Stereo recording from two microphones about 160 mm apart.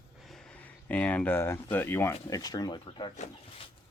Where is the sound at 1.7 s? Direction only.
15° left (ahead or behind); by 3.1 s 30° left (ahead or behind).